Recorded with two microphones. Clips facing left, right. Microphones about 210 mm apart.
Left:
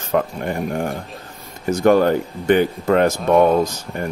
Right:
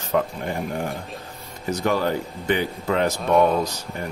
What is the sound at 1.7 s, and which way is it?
Speech, 50° left (ahead or behind).